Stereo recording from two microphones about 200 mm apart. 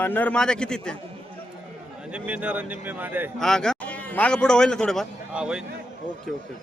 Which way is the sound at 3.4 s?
5° left (ahead or behind).